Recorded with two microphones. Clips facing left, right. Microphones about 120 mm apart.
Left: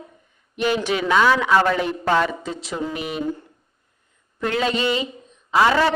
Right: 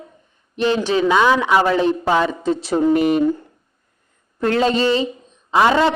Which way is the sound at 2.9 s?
50° right (ahead or behind).